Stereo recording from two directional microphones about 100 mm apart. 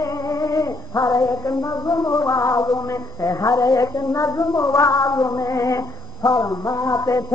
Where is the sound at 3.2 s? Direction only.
35° left (ahead or behind).